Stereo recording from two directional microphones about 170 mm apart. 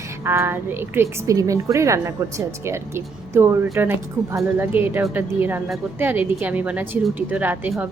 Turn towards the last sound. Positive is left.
turn(degrees=-10)  # may be behind; listen again after turning